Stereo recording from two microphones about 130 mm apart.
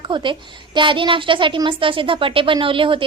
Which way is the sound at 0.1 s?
40° right (ahead or behind).